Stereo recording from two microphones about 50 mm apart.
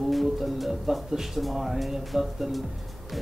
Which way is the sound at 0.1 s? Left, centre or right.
Centre.